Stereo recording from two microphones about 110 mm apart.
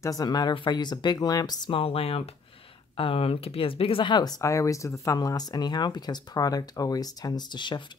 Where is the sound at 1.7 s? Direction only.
60° left (ahead or behind).